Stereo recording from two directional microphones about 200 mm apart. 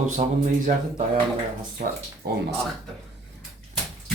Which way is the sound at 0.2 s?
35° right (ahead or behind).